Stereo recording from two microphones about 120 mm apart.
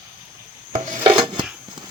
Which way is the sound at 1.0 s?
45° right (ahead or behind).